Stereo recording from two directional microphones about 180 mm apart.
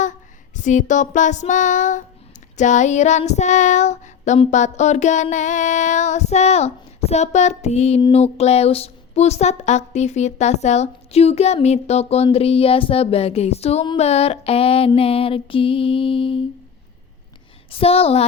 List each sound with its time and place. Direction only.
0.0 s child singing: 45° left (ahead or behind)
2.6 s a woman's voice: 40° left (ahead or behind)
17.7 s a woman's voice: 30° left (ahead or behind)